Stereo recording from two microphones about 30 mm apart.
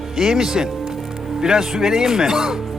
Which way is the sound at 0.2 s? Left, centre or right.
Centre.